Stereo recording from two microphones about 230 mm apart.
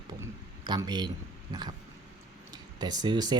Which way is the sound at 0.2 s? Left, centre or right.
Centre.